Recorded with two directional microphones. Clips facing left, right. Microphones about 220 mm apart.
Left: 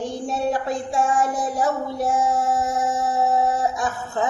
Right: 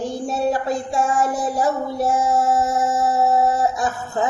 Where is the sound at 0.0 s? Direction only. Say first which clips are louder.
Right 2 dB; 5° right (ahead or behind).